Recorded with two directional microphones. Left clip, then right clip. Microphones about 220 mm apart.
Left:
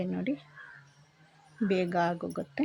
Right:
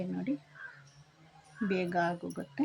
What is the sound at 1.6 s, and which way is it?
Speech, 35° left (ahead or behind).